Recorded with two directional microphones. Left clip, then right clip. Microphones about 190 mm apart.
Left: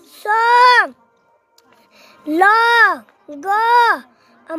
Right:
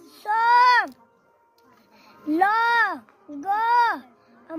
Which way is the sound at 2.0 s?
65° left (ahead or behind).